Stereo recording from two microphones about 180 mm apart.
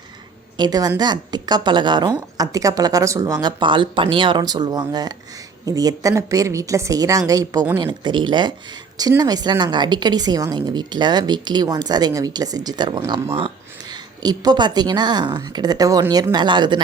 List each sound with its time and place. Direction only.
0.5 s a woman's voice: 20° right (ahead or behind)